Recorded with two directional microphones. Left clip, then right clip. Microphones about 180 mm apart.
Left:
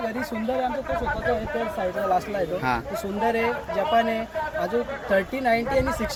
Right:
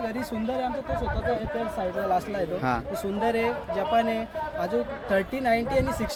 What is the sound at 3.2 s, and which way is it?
Speech, 20° right (ahead or behind).